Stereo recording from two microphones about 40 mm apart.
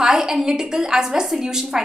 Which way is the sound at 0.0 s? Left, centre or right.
Centre.